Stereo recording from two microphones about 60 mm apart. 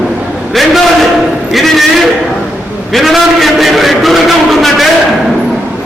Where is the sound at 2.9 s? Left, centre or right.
Centre.